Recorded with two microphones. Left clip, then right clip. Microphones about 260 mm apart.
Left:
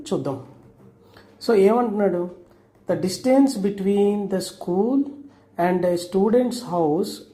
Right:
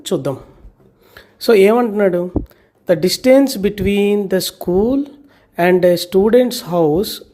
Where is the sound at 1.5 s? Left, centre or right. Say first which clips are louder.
Right 7 dB; right.